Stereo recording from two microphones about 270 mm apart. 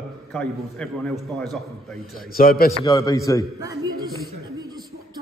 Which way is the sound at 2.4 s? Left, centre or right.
Left.